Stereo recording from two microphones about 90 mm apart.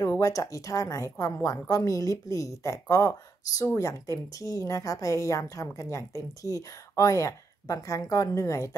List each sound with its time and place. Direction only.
0.2 s a woman's voice: 40° left (ahead or behind)